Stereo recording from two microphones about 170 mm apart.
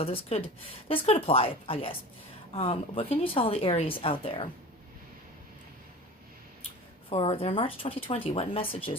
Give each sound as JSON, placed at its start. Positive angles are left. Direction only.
{"t": 0.0, "sound": "speech", "side_deg": 35}
{"t": 7.1, "sound": "speech", "side_deg": 35}